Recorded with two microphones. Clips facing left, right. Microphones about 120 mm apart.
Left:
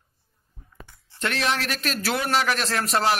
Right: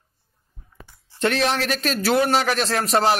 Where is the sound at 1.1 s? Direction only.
25° right (ahead or behind).